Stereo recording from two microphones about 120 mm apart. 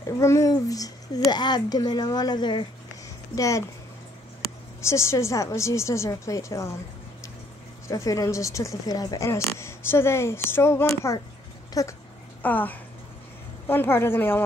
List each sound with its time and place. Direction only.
0.2 s speech: 25° left (ahead or behind)
3.3 s speech: 25° left (ahead or behind)
4.8 s speech: 25° left (ahead or behind)
7.9 s speech: 30° left (ahead or behind)
12.4 s speech: 15° left (ahead or behind)